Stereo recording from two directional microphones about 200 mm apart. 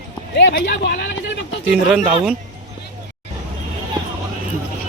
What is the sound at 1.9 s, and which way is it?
Speech, 5° right (ahead or behind).